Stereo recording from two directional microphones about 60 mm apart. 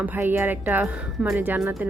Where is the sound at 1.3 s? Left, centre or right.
Right.